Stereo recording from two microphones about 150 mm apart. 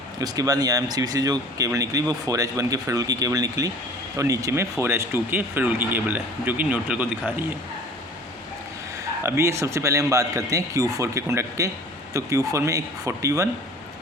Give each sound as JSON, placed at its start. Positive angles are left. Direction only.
{"t": 0.2, "sound": "speech", "side_deg": -25}
{"t": 9.2, "sound": "speech", "side_deg": -20}